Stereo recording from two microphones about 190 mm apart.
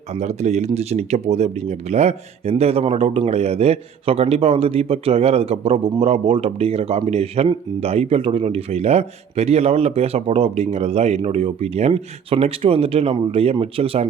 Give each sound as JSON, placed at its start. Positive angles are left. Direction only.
{"t": 0.1, "sound": "speech", "side_deg": -35}